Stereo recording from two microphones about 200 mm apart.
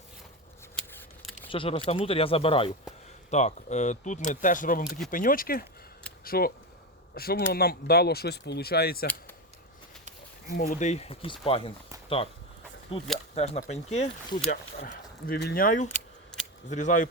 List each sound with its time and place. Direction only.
1.5 s speech: 25° left (ahead or behind); by 9.0 s 50° left (ahead or behind)
10.6 s speech: 35° left (ahead or behind)
14.5 s speech: 50° left (ahead or behind)